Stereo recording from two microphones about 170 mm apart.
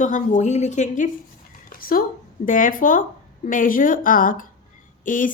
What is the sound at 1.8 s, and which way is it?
A woman's voice, 60° left (ahead or behind).